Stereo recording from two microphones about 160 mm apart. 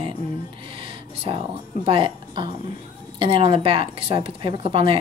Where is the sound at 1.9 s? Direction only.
35° right (ahead or behind).